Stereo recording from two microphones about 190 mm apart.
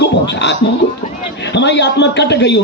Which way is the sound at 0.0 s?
65° left (ahead or behind).